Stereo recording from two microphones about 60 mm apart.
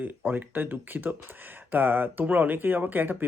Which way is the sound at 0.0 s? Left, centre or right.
Right.